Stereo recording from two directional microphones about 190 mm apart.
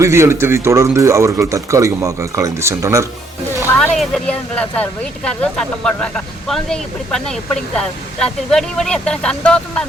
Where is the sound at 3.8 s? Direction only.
5° left (ahead or behind).